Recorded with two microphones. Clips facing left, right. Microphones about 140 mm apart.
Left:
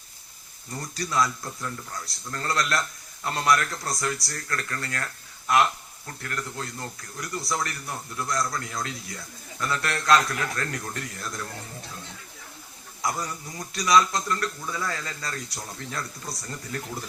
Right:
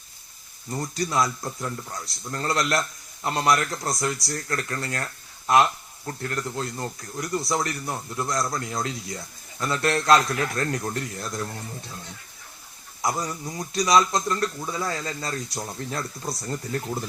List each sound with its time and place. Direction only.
0.8 s speech: 25° right (ahead or behind)
6.1 s speech: 25° right (ahead or behind)
13.0 s speech: 20° right (ahead or behind)